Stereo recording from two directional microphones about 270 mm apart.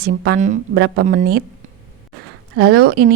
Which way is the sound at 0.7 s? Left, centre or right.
Right.